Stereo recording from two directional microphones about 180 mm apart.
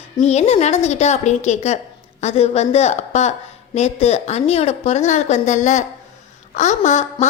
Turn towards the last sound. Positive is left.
turn(degrees=40)  # may be behind; listen again after turning